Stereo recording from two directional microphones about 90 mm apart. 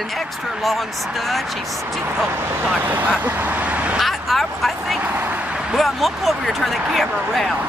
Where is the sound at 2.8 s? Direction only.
20° right (ahead or behind).